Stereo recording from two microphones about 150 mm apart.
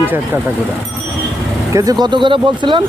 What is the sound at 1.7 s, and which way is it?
Speech, 25° right (ahead or behind).